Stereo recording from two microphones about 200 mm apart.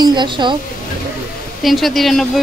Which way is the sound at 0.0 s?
20° right (ahead or behind).